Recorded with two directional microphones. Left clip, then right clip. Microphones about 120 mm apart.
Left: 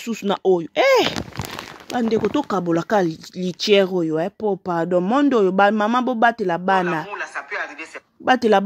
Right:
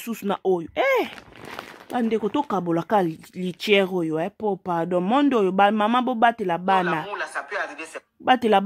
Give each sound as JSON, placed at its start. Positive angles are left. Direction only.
{"t": 0.0, "sound": "speech", "side_deg": 15}
{"t": 2.1, "sound": "speech", "side_deg": 30}
{"t": 7.1, "sound": "a sound", "side_deg": -25}
{"t": 8.3, "sound": "speech", "side_deg": 25}